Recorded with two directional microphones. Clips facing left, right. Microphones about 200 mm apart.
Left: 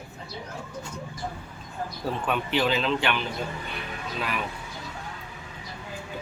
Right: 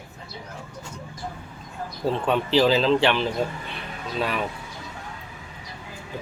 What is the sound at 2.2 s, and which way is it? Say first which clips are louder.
Speech: right 6 dB; 30° right (ahead or behind).